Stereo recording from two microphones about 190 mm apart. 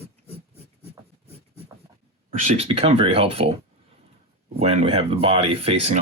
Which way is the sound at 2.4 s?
30° right (ahead or behind).